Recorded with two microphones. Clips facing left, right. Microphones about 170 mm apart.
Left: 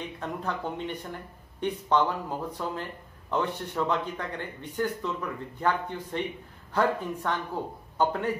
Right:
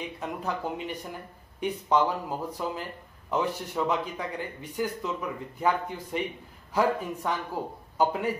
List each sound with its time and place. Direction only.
0.2 s speech: 5° right (ahead or behind)